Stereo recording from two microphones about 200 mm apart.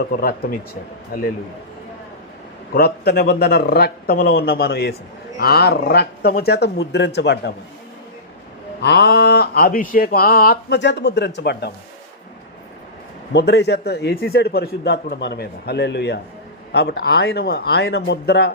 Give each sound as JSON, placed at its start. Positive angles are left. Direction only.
{"t": 0.0, "sound": "speech", "side_deg": 50}
{"t": 2.7, "sound": "a man's voice", "side_deg": 50}
{"t": 8.8, "sound": "speech", "side_deg": 55}
{"t": 13.3, "sound": "a man's voice", "side_deg": 55}